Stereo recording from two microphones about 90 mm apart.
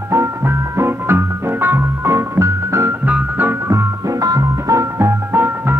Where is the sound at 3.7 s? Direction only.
45° right (ahead or behind).